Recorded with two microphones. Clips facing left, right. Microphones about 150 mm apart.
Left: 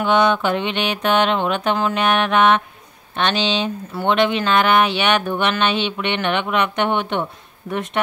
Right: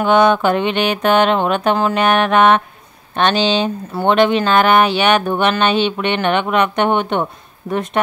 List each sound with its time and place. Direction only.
0.0 s mantra: 45° right (ahead or behind)
3.2 s speech: 40° right (ahead or behind)